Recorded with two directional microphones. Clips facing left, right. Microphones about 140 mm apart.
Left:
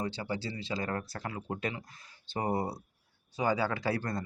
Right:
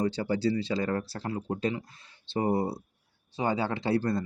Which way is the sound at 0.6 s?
30° right (ahead or behind).